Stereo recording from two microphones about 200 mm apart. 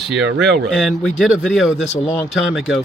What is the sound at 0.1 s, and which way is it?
Speech, 60° right (ahead or behind).